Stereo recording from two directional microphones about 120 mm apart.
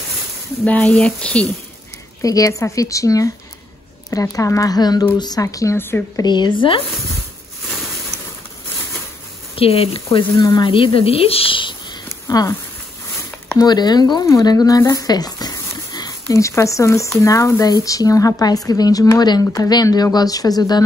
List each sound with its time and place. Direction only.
0.7 s speech: 10° left (ahead or behind)
2.2 s speech: 30° left (ahead or behind)
6.2 s speech: 40° left (ahead or behind)
9.6 s speech: 55° left (ahead or behind)
10.4 s speech: 35° left (ahead or behind)
10.7 s speech: 45° left (ahead or behind)
12.3 s speech: 30° left (ahead or behind)
13.6 s speech: 35° left (ahead or behind)